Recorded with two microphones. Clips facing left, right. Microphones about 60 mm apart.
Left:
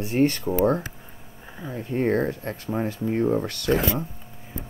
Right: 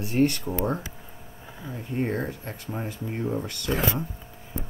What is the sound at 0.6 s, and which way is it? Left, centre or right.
Speech, left.